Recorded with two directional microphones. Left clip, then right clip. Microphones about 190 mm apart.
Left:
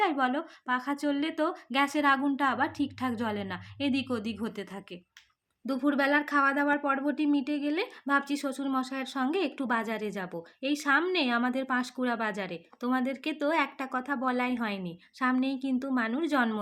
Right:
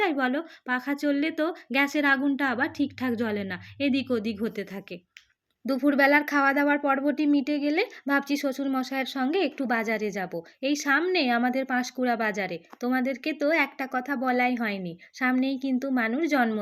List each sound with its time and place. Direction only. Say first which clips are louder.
0.0 s a woman's voice: right 2 dB; 10° right (ahead or behind)